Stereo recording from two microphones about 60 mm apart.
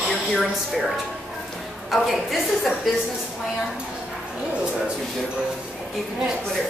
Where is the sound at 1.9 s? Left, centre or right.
Centre.